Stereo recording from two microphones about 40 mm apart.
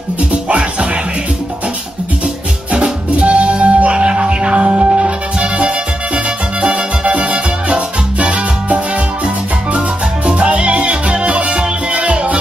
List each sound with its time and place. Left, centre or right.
0.3 s music: right
2.7 s music: right